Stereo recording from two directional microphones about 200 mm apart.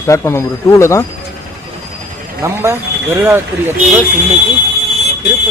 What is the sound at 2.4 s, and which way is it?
Speech, 10° right (ahead or behind).